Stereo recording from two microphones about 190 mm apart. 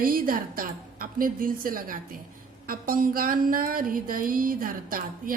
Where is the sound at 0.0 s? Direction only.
50° right (ahead or behind).